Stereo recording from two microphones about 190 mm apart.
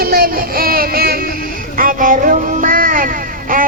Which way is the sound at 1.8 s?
45° right (ahead or behind).